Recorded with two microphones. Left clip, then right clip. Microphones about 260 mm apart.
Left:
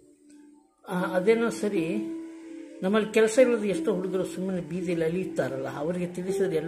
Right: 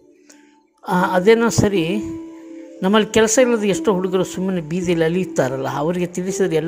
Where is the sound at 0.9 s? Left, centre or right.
Right.